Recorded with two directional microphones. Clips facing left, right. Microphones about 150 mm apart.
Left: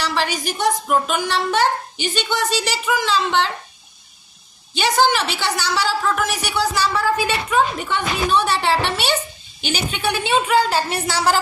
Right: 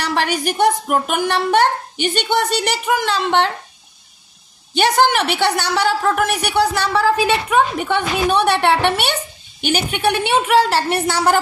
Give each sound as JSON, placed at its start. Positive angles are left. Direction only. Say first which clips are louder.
{"t": 0.0, "sound": "a woman's voice", "louder": "right 3 dB", "side_deg": -55}
{"t": 4.7, "sound": "a woman's voice", "louder": "right 3 dB", "side_deg": -60}